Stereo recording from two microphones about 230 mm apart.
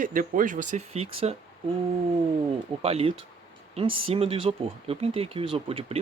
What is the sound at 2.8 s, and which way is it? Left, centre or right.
Speech, right.